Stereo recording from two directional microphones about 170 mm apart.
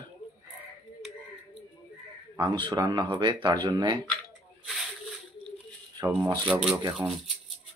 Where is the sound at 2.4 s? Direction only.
25° right (ahead or behind).